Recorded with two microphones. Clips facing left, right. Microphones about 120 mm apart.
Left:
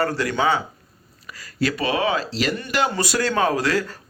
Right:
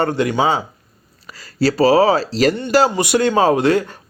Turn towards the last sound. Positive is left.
turn(degrees=-25)  # may be behind; listen again after turning